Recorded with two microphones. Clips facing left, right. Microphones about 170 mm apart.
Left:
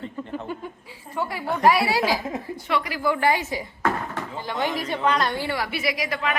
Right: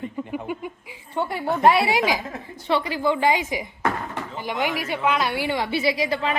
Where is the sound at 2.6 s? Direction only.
30° right (ahead or behind).